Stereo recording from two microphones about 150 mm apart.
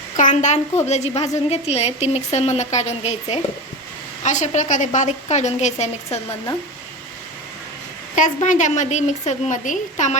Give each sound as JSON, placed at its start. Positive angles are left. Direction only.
{"t": 0.2, "sound": "a woman's voice", "side_deg": 55}
{"t": 8.1, "sound": "a woman's voice", "side_deg": 60}